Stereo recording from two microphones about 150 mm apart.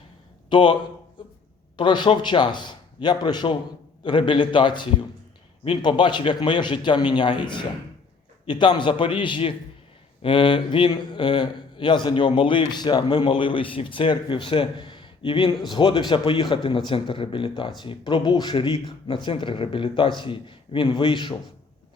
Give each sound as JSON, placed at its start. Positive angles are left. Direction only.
{"t": 0.5, "sound": "a man's voice", "side_deg": 35}